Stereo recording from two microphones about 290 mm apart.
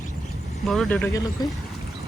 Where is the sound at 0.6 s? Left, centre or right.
Centre.